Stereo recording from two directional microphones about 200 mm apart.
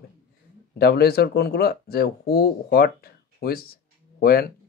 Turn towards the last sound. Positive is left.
turn(degrees=50)  # may be behind; listen again after turning